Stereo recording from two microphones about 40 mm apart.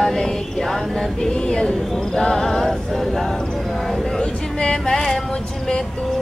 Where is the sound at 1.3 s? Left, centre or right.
Left.